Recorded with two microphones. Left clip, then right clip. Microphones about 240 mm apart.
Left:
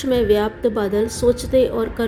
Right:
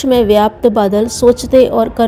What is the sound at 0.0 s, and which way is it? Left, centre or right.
A woman's voice, right.